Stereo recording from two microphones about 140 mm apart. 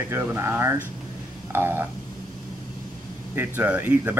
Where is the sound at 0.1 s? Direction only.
15° right (ahead or behind).